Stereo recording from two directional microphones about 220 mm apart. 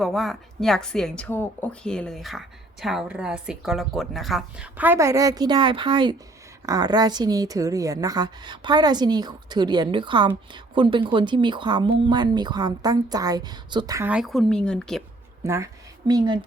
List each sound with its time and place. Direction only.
0.0 s a woman's voice: centre (ahead or behind)
15.4 s a woman's voice: 15° right (ahead or behind)